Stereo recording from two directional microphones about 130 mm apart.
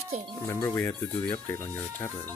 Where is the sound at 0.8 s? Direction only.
15° left (ahead or behind).